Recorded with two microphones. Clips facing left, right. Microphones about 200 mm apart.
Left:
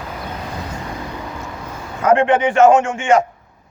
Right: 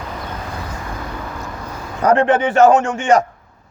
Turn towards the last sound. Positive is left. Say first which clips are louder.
# even
turn(degrees=-35)  # may be behind; listen again after turning